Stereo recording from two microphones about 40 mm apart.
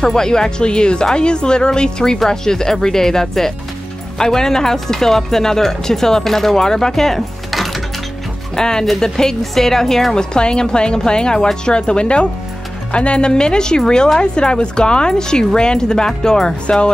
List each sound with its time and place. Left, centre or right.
0.0 s speech: centre
8.5 s speech: centre
10.3 s speech: left